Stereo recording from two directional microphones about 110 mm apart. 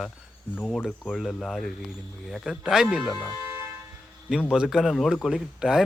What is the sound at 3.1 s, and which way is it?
Speech, 40° left (ahead or behind).